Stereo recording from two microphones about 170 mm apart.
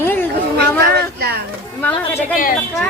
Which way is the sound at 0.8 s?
70° right (ahead or behind).